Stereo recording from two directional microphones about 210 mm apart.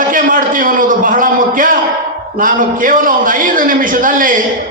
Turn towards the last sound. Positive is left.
turn(degrees=-40)  # may be behind; listen again after turning